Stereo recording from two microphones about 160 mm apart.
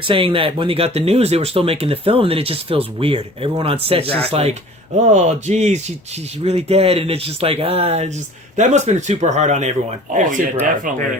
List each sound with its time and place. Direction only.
0.0 s speech: 35° right (ahead or behind); by 10.9 s 55° right (ahead or behind)